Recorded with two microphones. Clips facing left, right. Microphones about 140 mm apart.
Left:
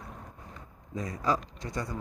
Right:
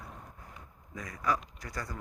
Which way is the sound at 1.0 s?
30° left (ahead or behind).